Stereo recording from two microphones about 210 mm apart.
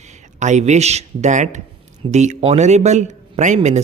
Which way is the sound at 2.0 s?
35° right (ahead or behind).